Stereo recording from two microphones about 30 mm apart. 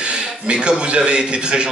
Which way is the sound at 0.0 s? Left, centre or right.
Right.